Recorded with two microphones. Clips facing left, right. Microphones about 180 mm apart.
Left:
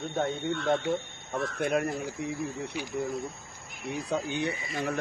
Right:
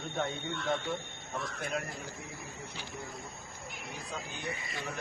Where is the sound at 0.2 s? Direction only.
50° left (ahead or behind).